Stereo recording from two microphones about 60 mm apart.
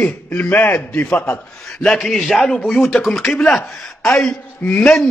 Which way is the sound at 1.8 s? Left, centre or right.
Centre.